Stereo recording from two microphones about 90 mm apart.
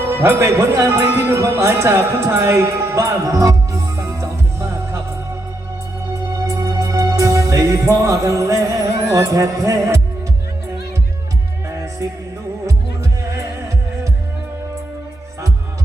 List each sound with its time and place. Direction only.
0.0 s a man's voice: 25° right (ahead or behind)
6.3 s music: 35° right (ahead or behind)
11.7 s music: 35° right (ahead or behind)